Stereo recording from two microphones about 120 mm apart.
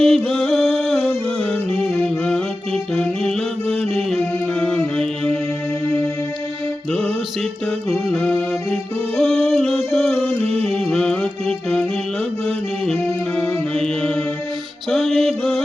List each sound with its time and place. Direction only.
0.0 s music: 5° left (ahead or behind)
7.9 s music: 5° left (ahead or behind)